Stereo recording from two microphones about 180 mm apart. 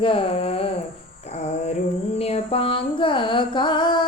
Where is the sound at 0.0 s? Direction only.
30° left (ahead or behind).